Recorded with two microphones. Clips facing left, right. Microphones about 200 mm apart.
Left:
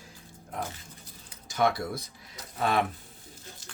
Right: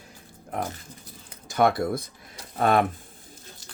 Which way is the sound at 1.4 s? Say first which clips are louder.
Right 5 dB; 55° right (ahead or behind).